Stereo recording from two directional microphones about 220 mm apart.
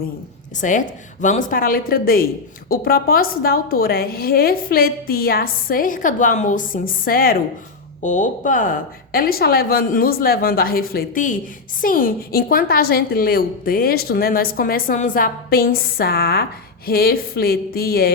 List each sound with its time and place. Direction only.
0.5 s a woman's voice: 35° left (ahead or behind)